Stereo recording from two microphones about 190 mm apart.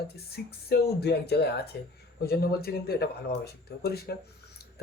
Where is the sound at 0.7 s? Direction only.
60° left (ahead or behind).